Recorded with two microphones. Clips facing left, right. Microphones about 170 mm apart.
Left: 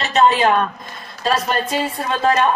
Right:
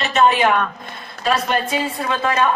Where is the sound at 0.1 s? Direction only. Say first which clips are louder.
Left 1 dB; 30° left (ahead or behind).